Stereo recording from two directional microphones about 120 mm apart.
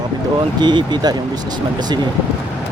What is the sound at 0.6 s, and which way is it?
Speech, 40° right (ahead or behind).